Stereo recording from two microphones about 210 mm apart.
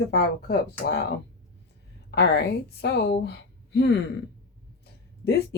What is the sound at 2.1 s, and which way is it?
Speech, 55° left (ahead or behind).